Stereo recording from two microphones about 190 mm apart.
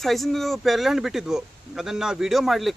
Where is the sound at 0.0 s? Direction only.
Centre (ahead or behind).